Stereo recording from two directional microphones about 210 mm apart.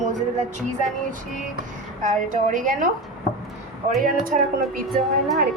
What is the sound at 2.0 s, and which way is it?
Speech, 35° right (ahead or behind).